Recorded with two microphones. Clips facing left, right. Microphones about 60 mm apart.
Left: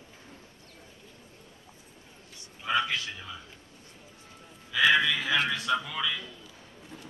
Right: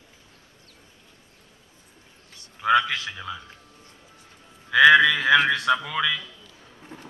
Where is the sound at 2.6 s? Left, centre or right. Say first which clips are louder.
Right 8 dB; right.